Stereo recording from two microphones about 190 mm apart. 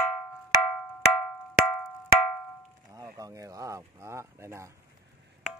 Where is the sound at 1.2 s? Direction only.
Centre (ahead or behind).